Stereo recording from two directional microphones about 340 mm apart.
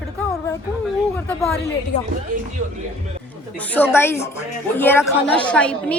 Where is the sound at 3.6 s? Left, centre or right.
Centre.